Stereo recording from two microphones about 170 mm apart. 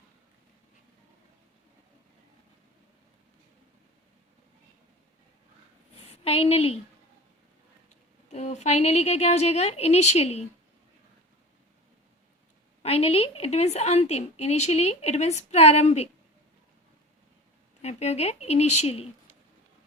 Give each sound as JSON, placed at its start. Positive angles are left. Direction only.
{"t": 6.1, "sound": "a woman's voice", "side_deg": 35}
{"t": 8.3, "sound": "a woman's voice", "side_deg": 40}
{"t": 12.8, "sound": "a woman's voice", "side_deg": 35}
{"t": 17.8, "sound": "a woman's voice", "side_deg": 40}